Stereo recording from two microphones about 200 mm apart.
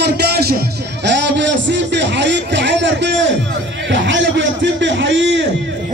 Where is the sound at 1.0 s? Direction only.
60° right (ahead or behind).